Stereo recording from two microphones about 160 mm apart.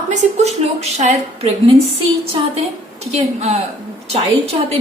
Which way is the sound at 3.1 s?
40° right (ahead or behind).